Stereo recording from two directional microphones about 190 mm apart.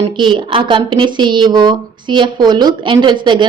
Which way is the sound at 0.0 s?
25° right (ahead or behind).